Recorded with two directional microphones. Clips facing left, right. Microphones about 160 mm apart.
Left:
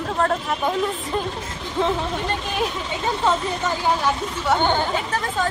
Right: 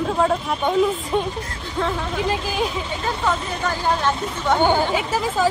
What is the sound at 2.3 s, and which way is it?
Speech, centre (ahead or behind).